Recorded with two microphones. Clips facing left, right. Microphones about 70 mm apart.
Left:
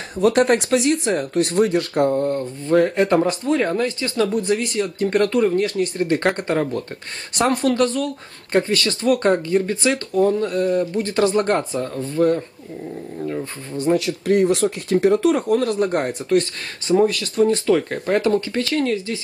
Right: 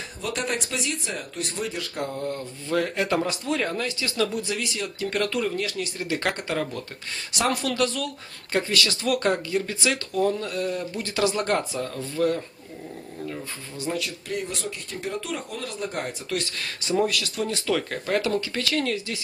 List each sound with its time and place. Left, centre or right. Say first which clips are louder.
0.2 s speech: left 13 dB; left
2.0 s speech: left 10 dB; left
13.4 s speech: left 9 dB; left
13.9 s speech: left 12 dB; left
16.0 s speech: left 10 dB; left
17.6 s speech: left 7 dB; centre